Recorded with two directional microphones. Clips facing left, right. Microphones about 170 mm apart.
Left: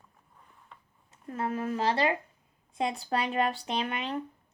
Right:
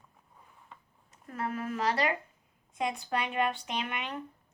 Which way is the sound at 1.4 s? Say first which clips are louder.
Left 3 dB; 30° left (ahead or behind).